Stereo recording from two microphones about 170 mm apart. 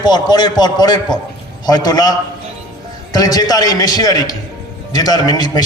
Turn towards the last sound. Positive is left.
turn(degrees=25)  # may be behind; listen again after turning